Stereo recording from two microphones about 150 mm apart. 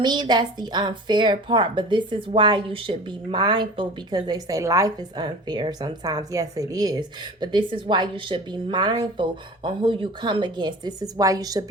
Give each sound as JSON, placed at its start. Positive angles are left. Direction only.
{"t": 0.0, "sound": "a woman's voice", "side_deg": -30}